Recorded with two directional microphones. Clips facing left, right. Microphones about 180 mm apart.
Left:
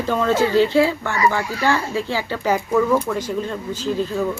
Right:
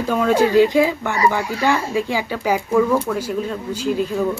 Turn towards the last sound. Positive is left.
turn(degrees=-10)  # may be behind; listen again after turning